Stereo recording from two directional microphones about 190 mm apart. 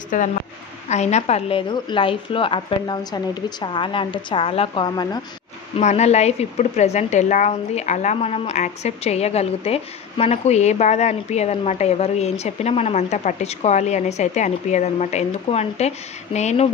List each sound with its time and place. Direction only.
0.1 s a woman's voice: 45° left (ahead or behind); by 5.2 s 25° left (ahead or behind)
5.8 s a woman's voice: 35° left (ahead or behind)